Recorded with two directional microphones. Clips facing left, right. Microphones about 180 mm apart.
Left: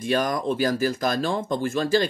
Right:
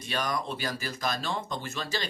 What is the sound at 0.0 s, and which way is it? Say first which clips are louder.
Speech: left 8 dB; 45° left (ahead or behind).